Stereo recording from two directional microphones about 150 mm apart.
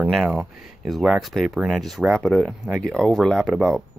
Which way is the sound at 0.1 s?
5° right (ahead or behind).